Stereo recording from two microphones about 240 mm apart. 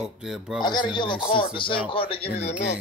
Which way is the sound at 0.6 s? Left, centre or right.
Centre.